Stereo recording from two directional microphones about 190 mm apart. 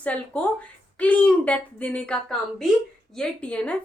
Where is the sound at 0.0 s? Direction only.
5° left (ahead or behind).